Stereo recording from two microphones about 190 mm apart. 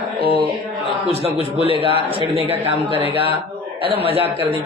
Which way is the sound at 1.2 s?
30° right (ahead or behind).